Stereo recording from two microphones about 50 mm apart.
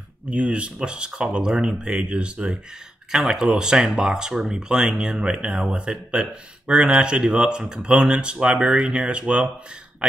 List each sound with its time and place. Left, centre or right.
0.3 s speech: right
3.1 s speech: centre
5.8 s speech: right